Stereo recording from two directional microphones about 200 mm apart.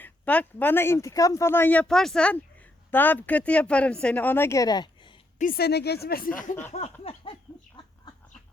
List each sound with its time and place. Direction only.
0.0 s speech: 10° left (ahead or behind)
5.4 s speech: 50° left (ahead or behind)
6.7 s a sound: 35° left (ahead or behind)
7.5 s chicken: centre (ahead or behind)